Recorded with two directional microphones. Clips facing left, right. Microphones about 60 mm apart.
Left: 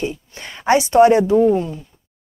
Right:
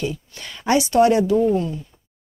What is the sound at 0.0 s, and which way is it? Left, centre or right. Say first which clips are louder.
Speech: left 2 dB; left.